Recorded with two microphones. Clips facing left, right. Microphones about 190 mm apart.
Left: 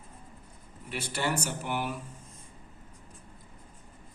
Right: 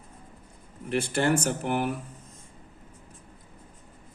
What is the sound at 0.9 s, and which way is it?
A man's voice, 50° right (ahead or behind).